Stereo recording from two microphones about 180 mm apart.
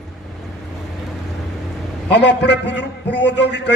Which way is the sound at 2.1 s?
70° left (ahead or behind).